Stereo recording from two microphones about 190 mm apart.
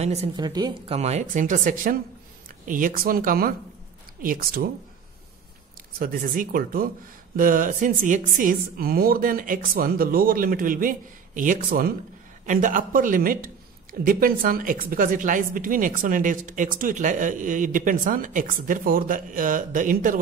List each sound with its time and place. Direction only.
0.0 s speech: 35° right (ahead or behind)
0.5 s speech: 20° right (ahead or behind)
0.9 s a woman's voice: 35° right (ahead or behind)
5.9 s a woman's voice: 50° right (ahead or behind)